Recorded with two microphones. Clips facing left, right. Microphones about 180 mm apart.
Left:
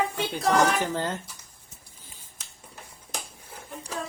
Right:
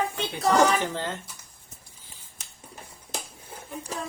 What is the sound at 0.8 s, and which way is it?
Speech, 40° left (ahead or behind).